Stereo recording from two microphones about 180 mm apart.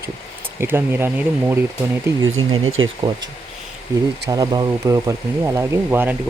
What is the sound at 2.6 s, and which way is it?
Speech, 90° right.